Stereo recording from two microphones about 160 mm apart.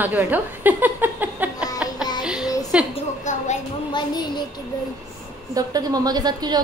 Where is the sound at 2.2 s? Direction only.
5° right (ahead or behind).